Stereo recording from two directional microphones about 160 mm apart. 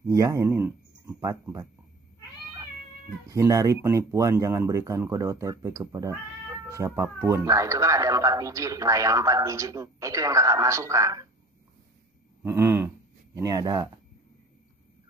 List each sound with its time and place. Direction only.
0.0 s speech: 20° right (ahead or behind)
3.3 s speech: 20° right (ahead or behind)
12.4 s a sound: 15° right (ahead or behind)